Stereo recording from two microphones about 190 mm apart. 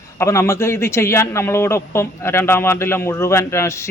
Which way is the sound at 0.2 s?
15° left (ahead or behind).